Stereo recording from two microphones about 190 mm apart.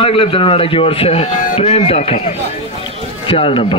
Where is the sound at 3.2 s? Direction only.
25° left (ahead or behind).